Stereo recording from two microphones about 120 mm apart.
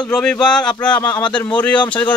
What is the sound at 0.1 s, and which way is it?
Speech, 10° left (ahead or behind).